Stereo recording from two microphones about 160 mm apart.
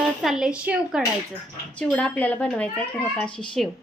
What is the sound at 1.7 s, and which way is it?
A woman's voice, 5° left (ahead or behind).